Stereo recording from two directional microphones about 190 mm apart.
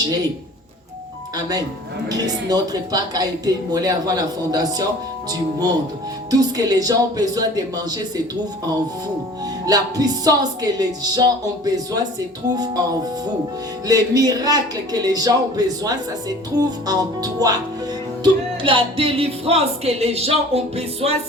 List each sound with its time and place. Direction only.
1.4 s speech: 20° right (ahead or behind)
9.6 s speech: 20° right (ahead or behind)
13.8 s speech: 20° right (ahead or behind)
18.2 s music: 25° right (ahead or behind)